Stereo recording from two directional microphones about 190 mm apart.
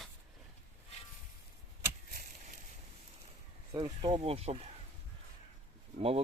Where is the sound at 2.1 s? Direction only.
50° right (ahead or behind).